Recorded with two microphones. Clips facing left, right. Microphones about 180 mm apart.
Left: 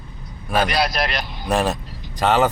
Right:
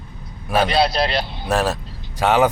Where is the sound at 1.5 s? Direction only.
5° right (ahead or behind).